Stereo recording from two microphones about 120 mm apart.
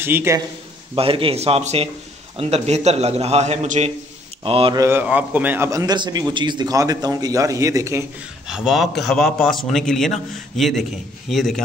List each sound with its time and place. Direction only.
0.0 s a man's voice: 20° right (ahead or behind)
0.9 s a man's voice: 50° right (ahead or behind); by 3.9 s 80° right
4.4 s speech: 45° right (ahead or behind)
4.7 s a man's voice: 20° right (ahead or behind)
5.7 s a man's voice: 25° right (ahead or behind)
8.5 s a man's voice: 5° right (ahead or behind)